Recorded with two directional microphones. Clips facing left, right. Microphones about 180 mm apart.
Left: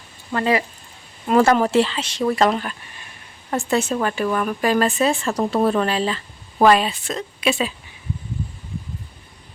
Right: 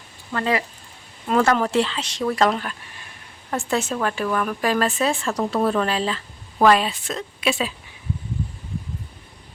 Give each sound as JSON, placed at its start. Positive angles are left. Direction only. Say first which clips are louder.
{"t": 0.3, "sound": "speech", "louder": "left 3 dB", "side_deg": 20}
{"t": 1.3, "sound": "speech", "louder": "left 3 dB", "side_deg": 10}